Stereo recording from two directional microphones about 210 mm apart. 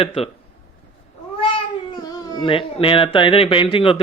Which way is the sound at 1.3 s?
20° left (ahead or behind).